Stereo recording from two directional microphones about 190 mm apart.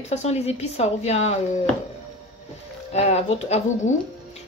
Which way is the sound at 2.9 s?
35° left (ahead or behind).